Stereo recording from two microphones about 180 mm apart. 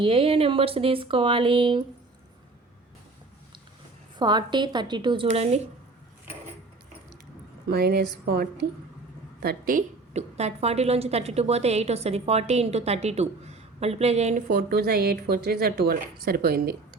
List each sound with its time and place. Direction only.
0.0 s speech: 30° right (ahead or behind)
4.2 s speech: 25° right (ahead or behind)
7.7 s a woman's voice: 60° right (ahead or behind); by 14.4 s 35° right (ahead or behind)
14.4 s speech: 60° right (ahead or behind)